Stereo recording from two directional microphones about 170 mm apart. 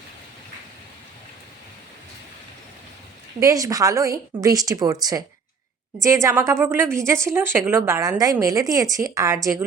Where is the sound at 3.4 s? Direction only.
20° right (ahead or behind).